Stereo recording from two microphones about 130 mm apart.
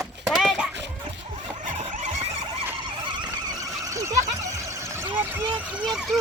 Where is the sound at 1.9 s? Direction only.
60° right (ahead or behind).